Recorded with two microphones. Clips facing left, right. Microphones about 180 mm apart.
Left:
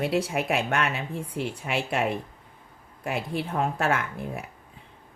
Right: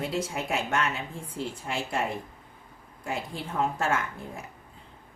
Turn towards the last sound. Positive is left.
turn(degrees=60)  # may be behind; listen again after turning